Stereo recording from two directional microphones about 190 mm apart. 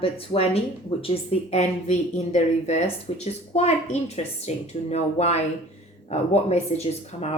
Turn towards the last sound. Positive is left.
turn(degrees=35)  # may be behind; listen again after turning